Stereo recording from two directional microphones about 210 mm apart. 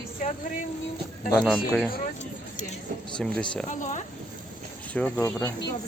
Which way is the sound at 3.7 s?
35° left (ahead or behind).